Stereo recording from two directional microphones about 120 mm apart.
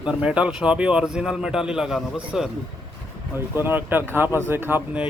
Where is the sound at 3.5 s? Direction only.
15° right (ahead or behind).